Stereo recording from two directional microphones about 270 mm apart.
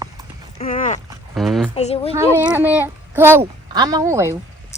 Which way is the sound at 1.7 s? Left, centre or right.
Left.